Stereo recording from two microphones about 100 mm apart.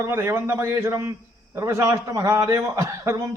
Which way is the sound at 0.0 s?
25° right (ahead or behind).